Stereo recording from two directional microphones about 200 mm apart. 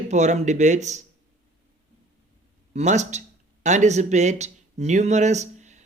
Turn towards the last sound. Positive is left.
turn(degrees=-35)  # may be behind; listen again after turning